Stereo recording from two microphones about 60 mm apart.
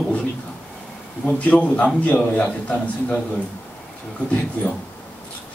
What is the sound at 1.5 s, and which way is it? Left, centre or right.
Speech, left.